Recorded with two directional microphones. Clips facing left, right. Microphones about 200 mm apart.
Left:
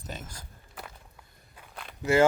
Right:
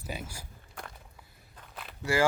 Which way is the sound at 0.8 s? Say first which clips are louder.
Even; 5° left (ahead or behind).